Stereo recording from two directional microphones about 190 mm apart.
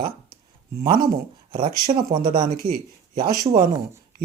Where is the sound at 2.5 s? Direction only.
55° right (ahead or behind).